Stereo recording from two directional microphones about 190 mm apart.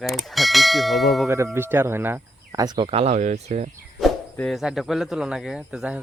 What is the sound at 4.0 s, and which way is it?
Speech, 5° left (ahead or behind).